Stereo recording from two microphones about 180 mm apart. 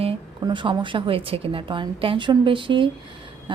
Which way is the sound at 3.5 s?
25° right (ahead or behind).